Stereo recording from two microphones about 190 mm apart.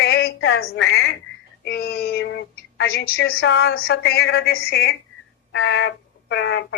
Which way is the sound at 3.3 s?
90° left.